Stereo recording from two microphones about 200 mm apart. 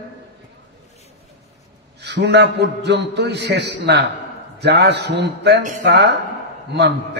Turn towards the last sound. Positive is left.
turn(degrees=-60)  # may be behind; listen again after turning